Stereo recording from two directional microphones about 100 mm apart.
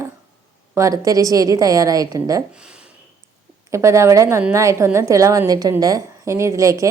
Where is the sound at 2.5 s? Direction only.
10° right (ahead or behind).